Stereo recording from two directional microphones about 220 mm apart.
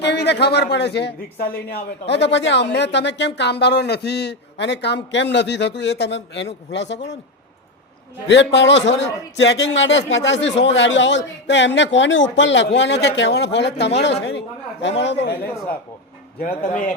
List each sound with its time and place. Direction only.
0.0 s speech: 50° left (ahead or behind)
8.3 s a man's voice: 55° left (ahead or behind)